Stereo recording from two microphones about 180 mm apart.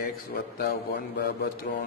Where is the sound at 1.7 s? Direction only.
50° left (ahead or behind).